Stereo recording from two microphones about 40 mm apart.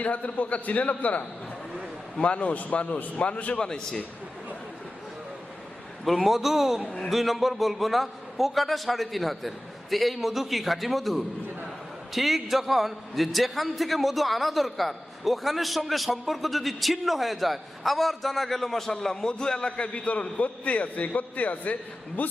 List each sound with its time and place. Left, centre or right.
0.0 s a man's voice: left
3.6 s a man's voice: centre
6.1 s a man's voice: centre
6.8 s a man's voice: left
7.1 s a man's voice: centre; by 22.3 s left